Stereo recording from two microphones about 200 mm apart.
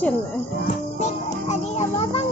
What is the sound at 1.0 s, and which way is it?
Music, 35° left (ahead or behind).